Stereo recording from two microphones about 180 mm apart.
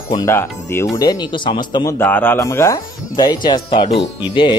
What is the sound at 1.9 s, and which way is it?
Speech, 10° left (ahead or behind).